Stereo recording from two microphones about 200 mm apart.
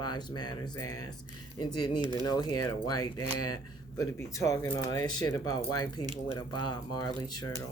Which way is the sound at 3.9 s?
15° left (ahead or behind).